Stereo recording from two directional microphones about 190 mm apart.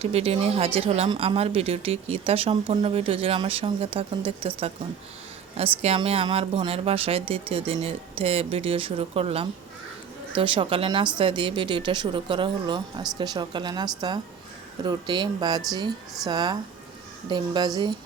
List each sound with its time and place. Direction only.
0.0 s speech: 30° right (ahead or behind)
5.8 s speech: 30° right (ahead or behind)